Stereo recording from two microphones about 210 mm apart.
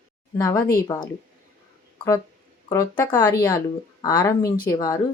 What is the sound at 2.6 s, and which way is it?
Speech, 15° left (ahead or behind).